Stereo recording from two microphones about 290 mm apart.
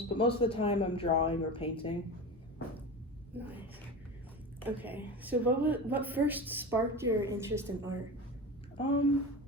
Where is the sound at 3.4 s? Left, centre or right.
Centre.